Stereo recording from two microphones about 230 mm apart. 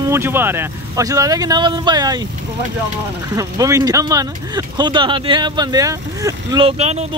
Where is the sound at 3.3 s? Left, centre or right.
Centre.